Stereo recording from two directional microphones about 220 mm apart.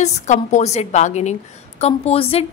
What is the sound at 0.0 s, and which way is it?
A woman's voice, 35° left (ahead or behind).